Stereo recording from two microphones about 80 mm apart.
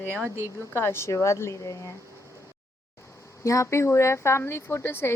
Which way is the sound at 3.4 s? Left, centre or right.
Left.